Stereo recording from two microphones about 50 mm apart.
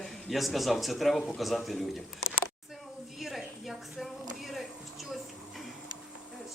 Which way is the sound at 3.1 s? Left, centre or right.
Centre.